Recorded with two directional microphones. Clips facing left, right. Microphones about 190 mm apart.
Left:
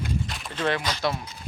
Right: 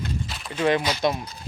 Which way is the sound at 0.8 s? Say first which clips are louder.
Right 4 dB; 15° right (ahead or behind).